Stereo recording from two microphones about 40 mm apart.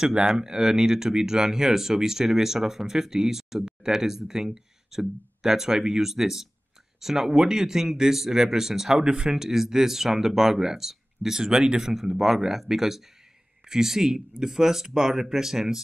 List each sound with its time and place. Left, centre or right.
0.0 s speech: right
9.0 s speech: right
9.4 s speech: centre
11.9 s speech: centre